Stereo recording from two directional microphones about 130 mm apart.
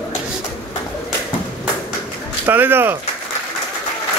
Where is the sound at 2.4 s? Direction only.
15° right (ahead or behind).